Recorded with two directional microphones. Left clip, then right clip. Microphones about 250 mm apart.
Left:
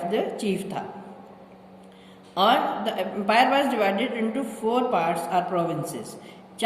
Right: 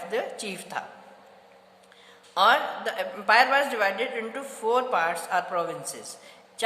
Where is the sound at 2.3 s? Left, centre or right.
Centre.